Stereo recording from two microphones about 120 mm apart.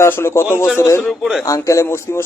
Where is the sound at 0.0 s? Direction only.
20° left (ahead or behind).